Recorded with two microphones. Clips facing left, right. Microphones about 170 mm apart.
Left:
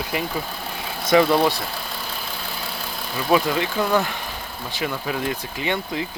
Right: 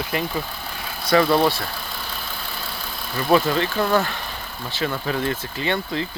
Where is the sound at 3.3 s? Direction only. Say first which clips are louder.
Right 1 dB; 10° left (ahead or behind).